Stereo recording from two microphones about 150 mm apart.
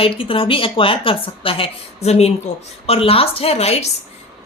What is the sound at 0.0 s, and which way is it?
A woman's voice, 35° left (ahead or behind).